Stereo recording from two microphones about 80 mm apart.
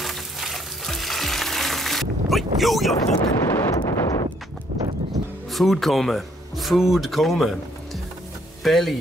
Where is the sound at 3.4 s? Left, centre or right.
Left.